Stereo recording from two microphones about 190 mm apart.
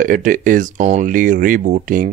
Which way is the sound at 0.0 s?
45° right (ahead or behind).